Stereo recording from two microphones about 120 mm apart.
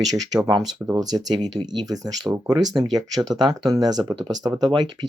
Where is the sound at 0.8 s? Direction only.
10° right (ahead or behind).